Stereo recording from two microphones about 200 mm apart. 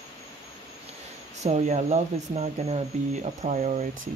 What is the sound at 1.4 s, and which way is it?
Speech, 35° right (ahead or behind).